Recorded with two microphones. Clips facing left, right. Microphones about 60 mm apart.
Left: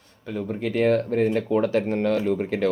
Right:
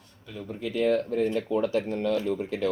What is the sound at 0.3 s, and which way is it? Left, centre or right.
Speech, left.